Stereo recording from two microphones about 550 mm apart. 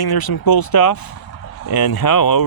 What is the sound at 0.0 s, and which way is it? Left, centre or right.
Speech, left.